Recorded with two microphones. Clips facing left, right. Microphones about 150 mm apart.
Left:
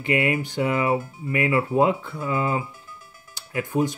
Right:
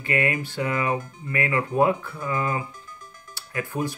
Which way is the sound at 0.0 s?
20° left (ahead or behind).